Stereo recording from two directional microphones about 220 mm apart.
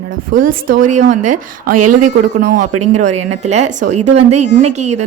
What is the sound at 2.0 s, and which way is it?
Speech, 35° right (ahead or behind).